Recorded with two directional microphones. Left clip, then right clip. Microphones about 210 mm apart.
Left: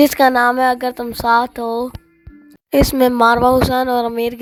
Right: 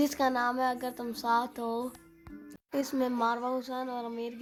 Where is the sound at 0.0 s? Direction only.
40° left (ahead or behind).